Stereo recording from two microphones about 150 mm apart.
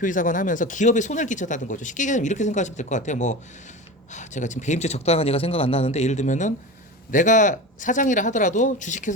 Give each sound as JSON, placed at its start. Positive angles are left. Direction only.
{"t": 0.0, "sound": "a man's voice", "side_deg": 60}